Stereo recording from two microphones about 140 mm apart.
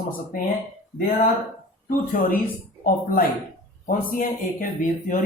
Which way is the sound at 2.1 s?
90° left.